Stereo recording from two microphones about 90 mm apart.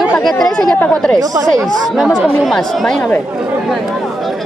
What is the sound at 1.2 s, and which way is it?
Speech, 45° right (ahead or behind).